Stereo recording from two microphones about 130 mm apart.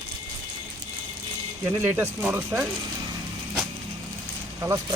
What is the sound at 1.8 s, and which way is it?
Speech, 15° right (ahead or behind).